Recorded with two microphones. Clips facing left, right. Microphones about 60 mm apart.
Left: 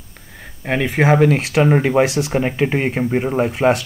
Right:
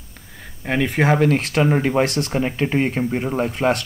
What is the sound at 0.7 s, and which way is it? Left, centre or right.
Speech, centre.